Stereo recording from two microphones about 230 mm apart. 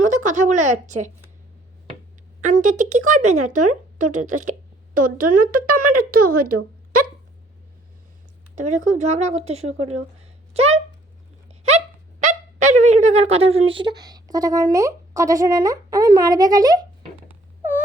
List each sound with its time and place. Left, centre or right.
0.0 s a woman's voice: right
2.4 s speech: right
8.5 s speech: right
11.4 s a sound: right; by 17.8 s centre